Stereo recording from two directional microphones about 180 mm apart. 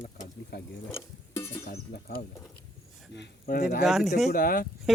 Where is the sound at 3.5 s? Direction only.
60° left (ahead or behind).